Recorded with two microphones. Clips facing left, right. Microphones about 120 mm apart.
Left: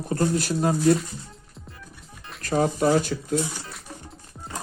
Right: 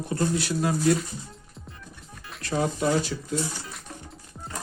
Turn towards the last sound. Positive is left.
turn(degrees=50)  # may be behind; listen again after turning